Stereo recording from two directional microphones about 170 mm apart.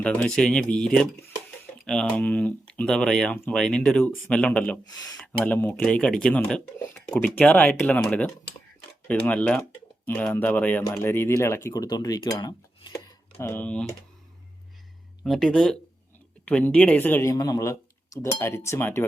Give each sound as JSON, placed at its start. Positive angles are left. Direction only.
{"t": 0.0, "sound": "speech", "side_deg": 5}
{"t": 4.9, "sound": "speech", "side_deg": 20}
{"t": 5.1, "sound": "speech", "side_deg": 10}
{"t": 13.5, "sound": "speech", "side_deg": 10}
{"t": 15.2, "sound": "speech", "side_deg": 5}